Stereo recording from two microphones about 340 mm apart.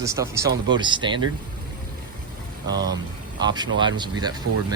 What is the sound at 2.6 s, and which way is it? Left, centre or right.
Speech, centre.